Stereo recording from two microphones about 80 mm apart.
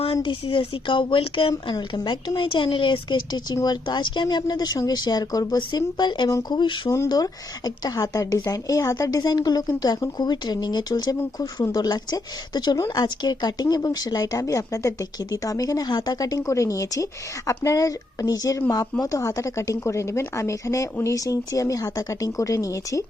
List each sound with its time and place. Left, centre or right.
0.1 s speech: left
2.0 s speech: left
5.5 s speech: left
6.5 s speech: left
7.1 s a woman's voice: left